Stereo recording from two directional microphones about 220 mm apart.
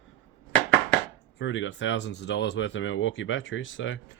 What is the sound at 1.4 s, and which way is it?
Speech, 60° left (ahead or behind).